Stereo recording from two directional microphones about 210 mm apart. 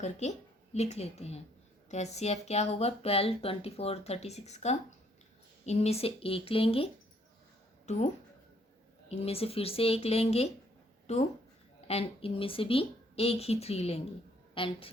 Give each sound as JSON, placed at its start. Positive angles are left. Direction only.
{"t": 0.0, "sound": "a woman's voice", "side_deg": 35}
{"t": 9.0, "sound": "speech", "side_deg": 30}
{"t": 11.0, "sound": "a sound", "side_deg": 30}
{"t": 11.9, "sound": "speech", "side_deg": 30}